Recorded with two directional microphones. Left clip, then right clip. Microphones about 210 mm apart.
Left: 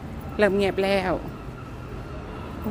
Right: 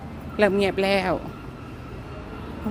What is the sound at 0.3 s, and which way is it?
Speech, 10° right (ahead or behind).